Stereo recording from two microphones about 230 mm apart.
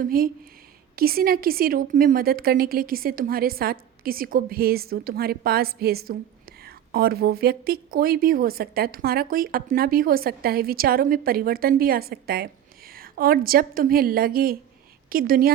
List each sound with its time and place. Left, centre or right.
0.0 s speech: right